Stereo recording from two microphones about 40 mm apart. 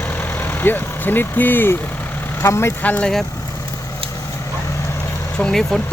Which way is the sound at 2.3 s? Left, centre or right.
Left.